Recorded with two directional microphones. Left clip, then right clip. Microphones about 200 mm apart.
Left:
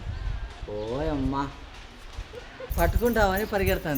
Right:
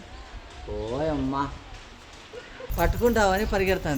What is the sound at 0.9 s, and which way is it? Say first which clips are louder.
Speech: right 3 dB; 5° right (ahead or behind).